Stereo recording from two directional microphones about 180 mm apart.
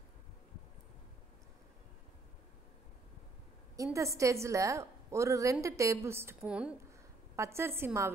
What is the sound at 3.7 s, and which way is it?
A woman's voice, 15° right (ahead or behind).